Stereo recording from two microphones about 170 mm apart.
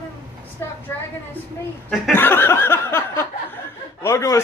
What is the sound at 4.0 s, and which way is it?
Speech, 20° left (ahead or behind).